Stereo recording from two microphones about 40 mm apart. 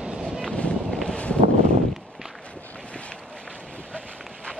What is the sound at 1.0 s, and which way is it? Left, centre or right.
Wind, left.